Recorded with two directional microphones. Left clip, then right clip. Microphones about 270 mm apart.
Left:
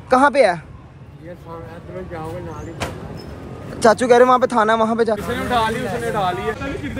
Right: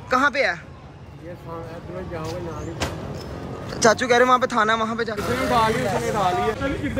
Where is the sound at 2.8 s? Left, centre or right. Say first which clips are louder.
Left 1 dB; left.